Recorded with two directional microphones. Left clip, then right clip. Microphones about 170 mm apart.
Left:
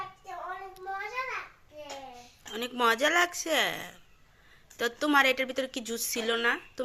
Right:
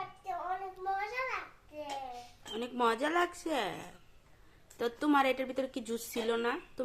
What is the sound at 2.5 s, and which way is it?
A woman's voice, centre (ahead or behind).